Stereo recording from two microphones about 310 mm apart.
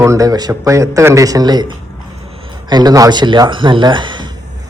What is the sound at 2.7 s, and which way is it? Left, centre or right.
A man's voice, centre.